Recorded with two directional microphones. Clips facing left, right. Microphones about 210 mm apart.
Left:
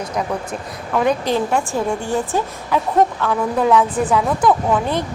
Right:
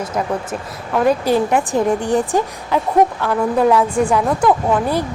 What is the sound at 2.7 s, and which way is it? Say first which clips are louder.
A woman's voice: right 2 dB; 5° right (ahead or behind).